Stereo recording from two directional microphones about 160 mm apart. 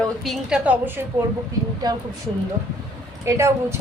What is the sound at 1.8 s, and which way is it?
Speech, 25° right (ahead or behind).